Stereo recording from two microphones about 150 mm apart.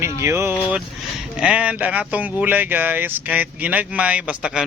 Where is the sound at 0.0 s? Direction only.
20° right (ahead or behind).